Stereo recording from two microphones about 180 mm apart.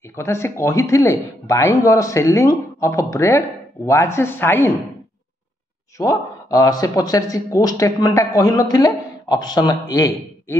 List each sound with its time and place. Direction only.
0.1 s speech: 15° left (ahead or behind)
5.9 s speech: 20° left (ahead or behind)